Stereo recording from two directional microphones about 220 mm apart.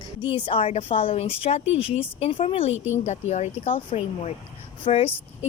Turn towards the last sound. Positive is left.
turn(degrees=25)  # may be behind; listen again after turning